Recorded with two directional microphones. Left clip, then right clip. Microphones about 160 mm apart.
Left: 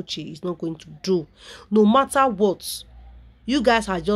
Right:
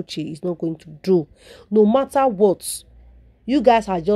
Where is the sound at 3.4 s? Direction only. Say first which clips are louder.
Right 4 dB; 20° right (ahead or behind).